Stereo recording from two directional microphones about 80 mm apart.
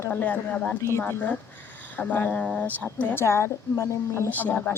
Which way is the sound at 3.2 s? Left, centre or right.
Left.